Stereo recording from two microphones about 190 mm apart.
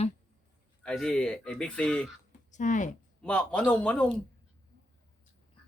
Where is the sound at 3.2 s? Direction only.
5° left (ahead or behind).